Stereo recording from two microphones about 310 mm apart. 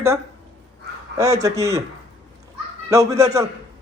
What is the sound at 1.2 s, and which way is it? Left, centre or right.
Speech, centre.